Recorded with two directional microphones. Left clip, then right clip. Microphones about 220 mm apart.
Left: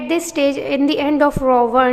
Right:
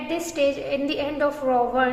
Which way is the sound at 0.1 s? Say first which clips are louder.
Left 6 dB; 40° left (ahead or behind).